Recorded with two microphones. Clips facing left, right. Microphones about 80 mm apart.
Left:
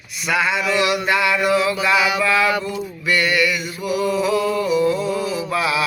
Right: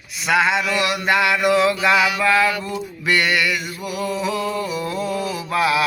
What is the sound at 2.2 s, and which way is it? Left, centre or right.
Male singing, right.